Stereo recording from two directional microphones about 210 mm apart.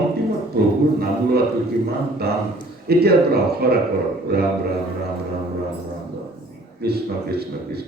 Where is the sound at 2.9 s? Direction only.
50° right (ahead or behind).